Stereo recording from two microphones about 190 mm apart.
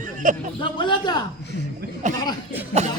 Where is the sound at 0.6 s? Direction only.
25° left (ahead or behind).